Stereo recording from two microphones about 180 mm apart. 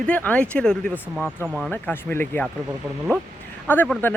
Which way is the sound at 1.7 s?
10° left (ahead or behind).